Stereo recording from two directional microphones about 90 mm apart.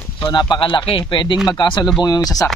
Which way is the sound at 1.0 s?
55° left (ahead or behind).